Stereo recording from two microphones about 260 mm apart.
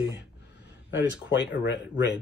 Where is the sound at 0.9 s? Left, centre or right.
Left.